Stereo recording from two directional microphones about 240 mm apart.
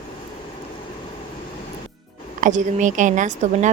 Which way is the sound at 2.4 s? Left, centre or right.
Right.